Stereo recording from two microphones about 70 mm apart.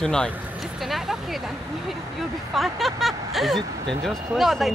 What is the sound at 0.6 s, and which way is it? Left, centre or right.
Speech, centre.